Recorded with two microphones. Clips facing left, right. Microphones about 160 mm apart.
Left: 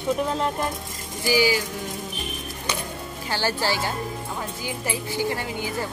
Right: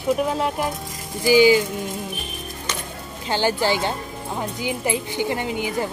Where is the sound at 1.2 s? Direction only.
20° right (ahead or behind).